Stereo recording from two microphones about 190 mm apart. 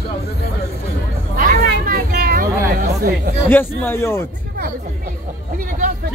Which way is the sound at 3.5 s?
10° left (ahead or behind).